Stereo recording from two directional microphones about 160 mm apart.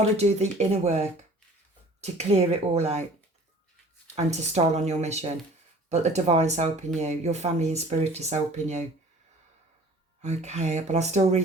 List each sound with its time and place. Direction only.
0.0 s speech: 40° right (ahead or behind)
10.2 s speech: 45° right (ahead or behind)